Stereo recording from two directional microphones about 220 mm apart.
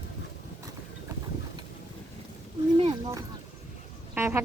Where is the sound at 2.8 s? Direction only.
20° right (ahead or behind).